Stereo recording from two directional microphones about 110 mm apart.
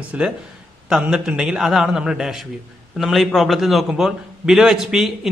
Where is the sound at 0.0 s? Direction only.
15° right (ahead or behind).